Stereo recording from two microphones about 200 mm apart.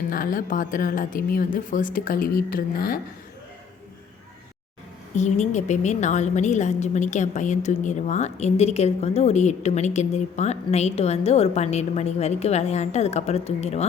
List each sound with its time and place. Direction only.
0.1 s a woman's voice: 45° left (ahead or behind)
5.1 s a woman's voice: 35° left (ahead or behind)